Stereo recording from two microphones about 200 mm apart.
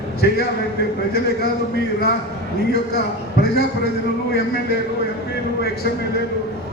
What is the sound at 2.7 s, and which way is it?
A man's voice, 50° left (ahead or behind).